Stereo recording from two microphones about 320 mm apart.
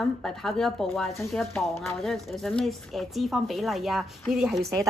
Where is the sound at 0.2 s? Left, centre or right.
Centre.